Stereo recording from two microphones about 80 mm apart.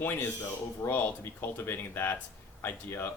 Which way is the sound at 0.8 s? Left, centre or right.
Left.